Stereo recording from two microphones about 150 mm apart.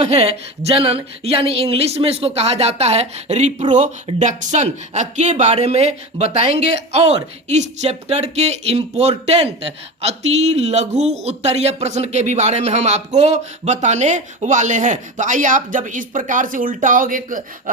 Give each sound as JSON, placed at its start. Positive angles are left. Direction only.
{"t": 0.0, "sound": "speech", "side_deg": -45}